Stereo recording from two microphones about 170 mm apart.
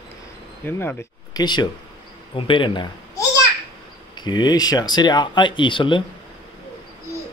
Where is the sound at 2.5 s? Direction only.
30° left (ahead or behind).